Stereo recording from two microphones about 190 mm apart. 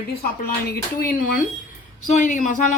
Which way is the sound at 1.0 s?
50° left (ahead or behind).